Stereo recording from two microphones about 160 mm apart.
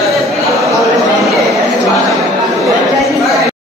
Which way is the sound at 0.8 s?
Centre (ahead or behind).